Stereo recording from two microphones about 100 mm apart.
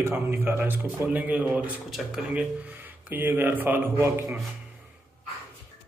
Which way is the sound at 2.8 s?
20° right (ahead or behind).